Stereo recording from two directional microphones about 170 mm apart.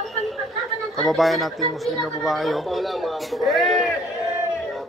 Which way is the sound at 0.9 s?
Centre (ahead or behind).